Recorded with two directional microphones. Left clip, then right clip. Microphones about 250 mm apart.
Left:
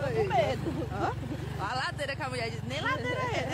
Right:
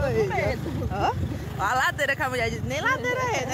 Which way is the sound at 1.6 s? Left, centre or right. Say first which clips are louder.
Right 10 dB; right.